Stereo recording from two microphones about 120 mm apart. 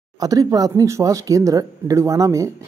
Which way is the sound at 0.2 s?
30° right (ahead or behind).